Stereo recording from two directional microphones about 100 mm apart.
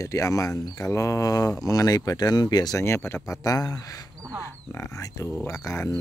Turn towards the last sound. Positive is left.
turn(degrees=30)  # may be behind; listen again after turning